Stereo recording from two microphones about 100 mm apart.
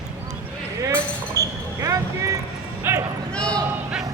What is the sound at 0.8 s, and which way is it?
Basketball bounce, 35° right (ahead or behind).